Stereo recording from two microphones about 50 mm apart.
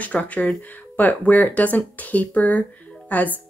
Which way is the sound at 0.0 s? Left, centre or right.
Left.